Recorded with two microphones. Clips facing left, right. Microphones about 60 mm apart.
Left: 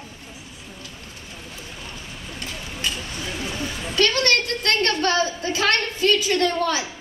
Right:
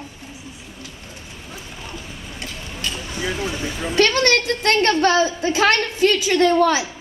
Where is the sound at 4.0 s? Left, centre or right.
Right.